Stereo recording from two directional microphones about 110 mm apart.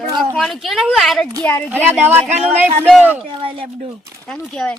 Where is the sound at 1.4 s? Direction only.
15° left (ahead or behind).